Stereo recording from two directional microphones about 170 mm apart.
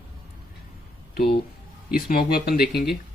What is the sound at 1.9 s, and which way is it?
Speech, 60° left (ahead or behind).